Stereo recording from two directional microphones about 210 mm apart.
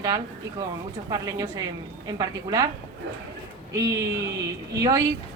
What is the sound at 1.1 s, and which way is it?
Speech, 15° right (ahead or behind).